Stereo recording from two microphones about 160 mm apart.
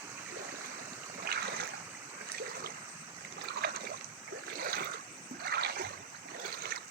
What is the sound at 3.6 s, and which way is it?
Boat, 80° right.